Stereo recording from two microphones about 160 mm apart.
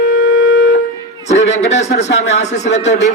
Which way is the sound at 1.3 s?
45° left (ahead or behind).